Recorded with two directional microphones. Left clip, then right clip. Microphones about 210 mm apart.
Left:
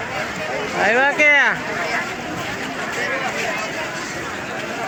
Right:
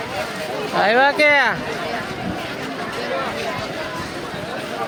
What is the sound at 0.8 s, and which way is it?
Speech, 15° right (ahead or behind).